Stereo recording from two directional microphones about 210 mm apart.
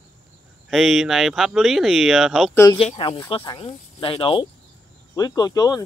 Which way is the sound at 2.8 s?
30° left (ahead or behind).